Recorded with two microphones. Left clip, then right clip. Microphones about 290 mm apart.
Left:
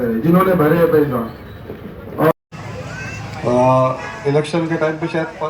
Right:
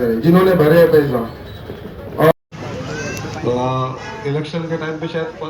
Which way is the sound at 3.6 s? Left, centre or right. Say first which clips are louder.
Left 7 dB; left.